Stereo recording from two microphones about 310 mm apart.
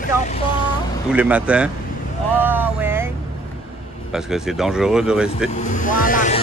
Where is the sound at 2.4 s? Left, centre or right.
Centre.